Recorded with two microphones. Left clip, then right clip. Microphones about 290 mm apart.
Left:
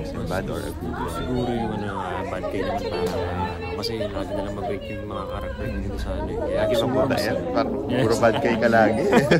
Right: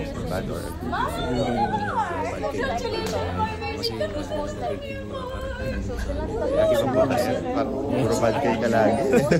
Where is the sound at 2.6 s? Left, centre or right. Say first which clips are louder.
Left 2 dB; right.